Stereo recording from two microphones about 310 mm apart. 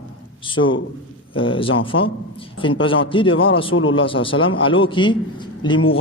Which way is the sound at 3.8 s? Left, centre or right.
Left.